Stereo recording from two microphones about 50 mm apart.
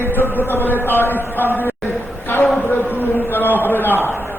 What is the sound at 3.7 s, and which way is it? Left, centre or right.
Speech, left.